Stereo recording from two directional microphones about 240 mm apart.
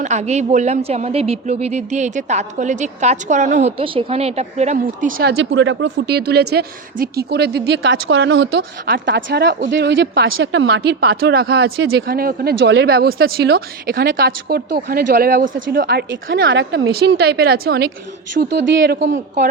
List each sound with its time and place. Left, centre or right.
0.0 s speech: right
5.4 s a woman's voice: right